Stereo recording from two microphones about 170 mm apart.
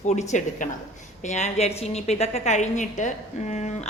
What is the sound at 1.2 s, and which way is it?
A woman's voice, 40° left (ahead or behind).